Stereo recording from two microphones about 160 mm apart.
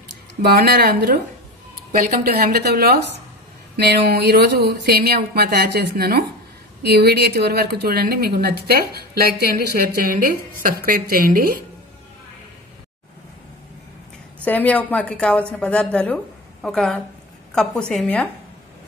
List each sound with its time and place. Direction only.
0.6 s a woman's voice: 75° right (ahead or behind)
1.9 s a woman's voice: 65° right (ahead or behind)
14.4 s a woman's voice: 10° left (ahead or behind)